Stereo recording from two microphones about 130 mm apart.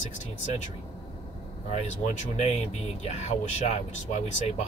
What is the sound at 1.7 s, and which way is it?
Speech, 65° left (ahead or behind).